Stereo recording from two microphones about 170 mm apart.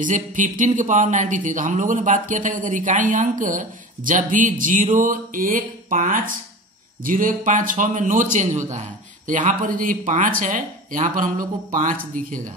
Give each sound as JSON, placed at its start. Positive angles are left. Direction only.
{"t": 0.0, "sound": "speech", "side_deg": -50}